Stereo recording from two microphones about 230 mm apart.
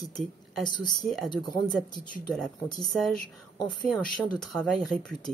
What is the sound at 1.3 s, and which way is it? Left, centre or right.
Speech, centre.